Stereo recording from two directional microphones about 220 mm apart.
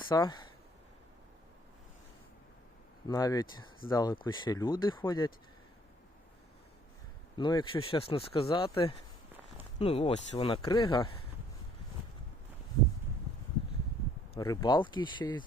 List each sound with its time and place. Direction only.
0.1 s speech: 20° left (ahead or behind)
3.1 s speech: 15° left (ahead or behind)
7.3 s speech: 20° left (ahead or behind)
9.7 s speech: 30° left (ahead or behind)
14.3 s speech: 15° left (ahead or behind)